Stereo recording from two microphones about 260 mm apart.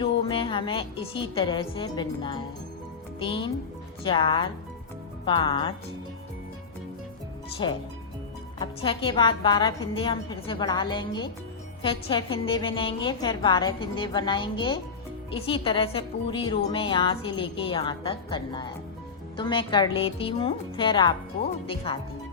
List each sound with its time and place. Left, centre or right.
0.0 s a woman's voice: left
7.6 s a woman's voice: centre